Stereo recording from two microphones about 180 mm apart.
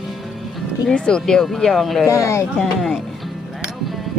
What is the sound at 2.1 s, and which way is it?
Speech, 15° left (ahead or behind).